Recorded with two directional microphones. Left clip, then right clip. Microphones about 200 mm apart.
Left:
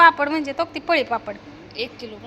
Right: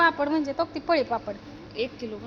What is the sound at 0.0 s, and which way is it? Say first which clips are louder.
A woman's voice: left 8 dB; 10° right (ahead or behind).